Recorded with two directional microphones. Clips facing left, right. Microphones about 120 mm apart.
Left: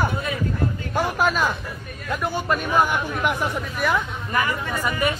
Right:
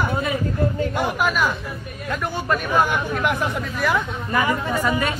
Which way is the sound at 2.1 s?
15° left (ahead or behind).